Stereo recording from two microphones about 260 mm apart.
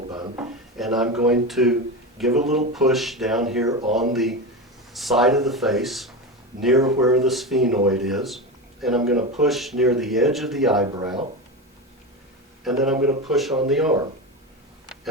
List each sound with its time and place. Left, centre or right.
0.1 s drawer open or close: centre
0.8 s speech: centre
10.9 s speech: centre
12.6 s speech: centre